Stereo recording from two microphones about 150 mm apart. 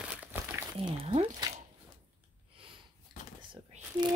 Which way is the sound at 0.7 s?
40° right (ahead or behind).